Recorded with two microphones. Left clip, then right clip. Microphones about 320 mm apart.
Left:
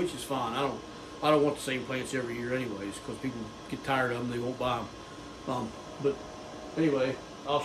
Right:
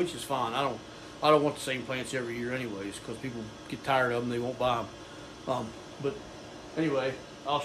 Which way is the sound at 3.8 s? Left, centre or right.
Centre.